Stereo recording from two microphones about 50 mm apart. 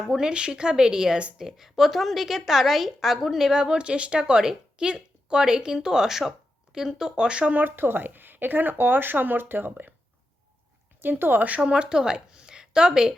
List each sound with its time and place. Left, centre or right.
0.0 s a woman's voice: centre
7.5 s speech: right
11.0 s speech: right
11.4 s a woman's voice: right